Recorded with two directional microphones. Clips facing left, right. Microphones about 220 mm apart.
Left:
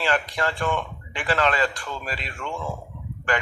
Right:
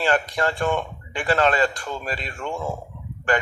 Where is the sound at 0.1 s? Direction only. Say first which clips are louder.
Right 3 dB; 45° right (ahead or behind).